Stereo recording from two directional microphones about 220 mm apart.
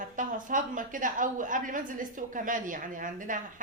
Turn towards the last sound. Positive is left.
turn(degrees=-35)  # may be behind; listen again after turning